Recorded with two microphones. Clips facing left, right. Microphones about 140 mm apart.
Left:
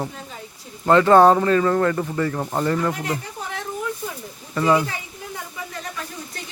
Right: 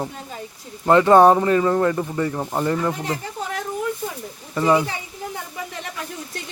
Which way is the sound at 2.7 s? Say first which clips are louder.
Even; 20° right (ahead or behind).